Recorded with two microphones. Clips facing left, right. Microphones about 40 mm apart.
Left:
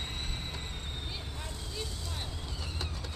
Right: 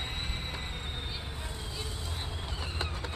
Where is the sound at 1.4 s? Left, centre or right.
Right.